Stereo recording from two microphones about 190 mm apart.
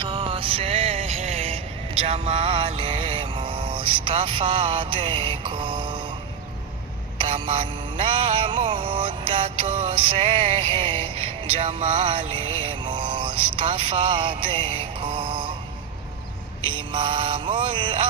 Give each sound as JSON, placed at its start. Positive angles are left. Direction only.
{"t": 0.0, "sound": "music", "side_deg": -25}
{"t": 7.2, "sound": "music", "side_deg": -25}
{"t": 16.6, "sound": "music", "side_deg": -25}